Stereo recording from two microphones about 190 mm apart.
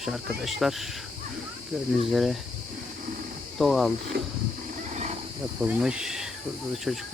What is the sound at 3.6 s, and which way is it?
Speech, centre (ahead or behind).